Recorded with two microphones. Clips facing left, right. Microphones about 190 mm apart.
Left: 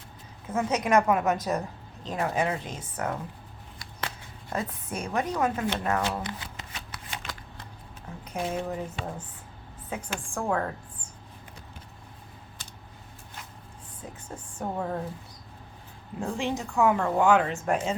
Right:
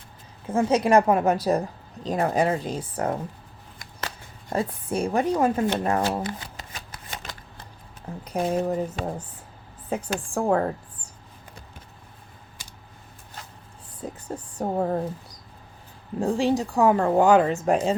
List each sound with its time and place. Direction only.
0.4 s speech: 30° right (ahead or behind)
4.4 s speech: 30° right (ahead or behind)
14.0 s speech: 35° right (ahead or behind)